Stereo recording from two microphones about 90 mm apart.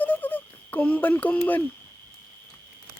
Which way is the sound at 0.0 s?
20° left (ahead or behind).